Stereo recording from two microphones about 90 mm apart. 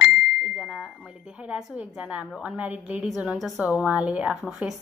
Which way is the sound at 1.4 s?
15° right (ahead or behind).